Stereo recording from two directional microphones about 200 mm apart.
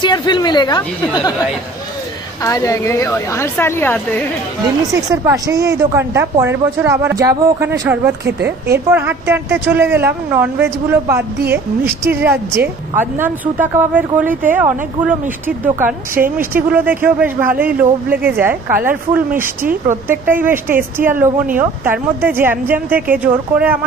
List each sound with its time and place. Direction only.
0.0 s speech: 20° left (ahead or behind)
2.4 s a woman's voice: 15° left (ahead or behind)
4.9 s speech: 15° right (ahead or behind)